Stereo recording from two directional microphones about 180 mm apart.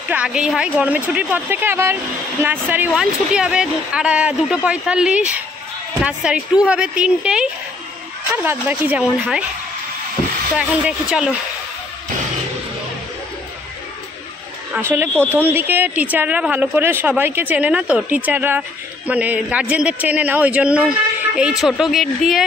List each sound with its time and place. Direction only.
0.1 s a man's voice: 5° right (ahead or behind)
8.5 s a man's voice: 10° right (ahead or behind)
10.6 s speech: 5° right (ahead or behind)
14.7 s a man's voice: 10° right (ahead or behind)